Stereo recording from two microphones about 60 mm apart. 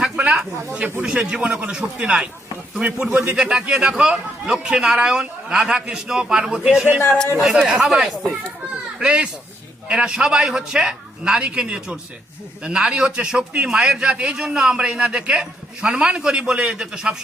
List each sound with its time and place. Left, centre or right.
0.0 s snake: centre
1.0 s a man's voice: centre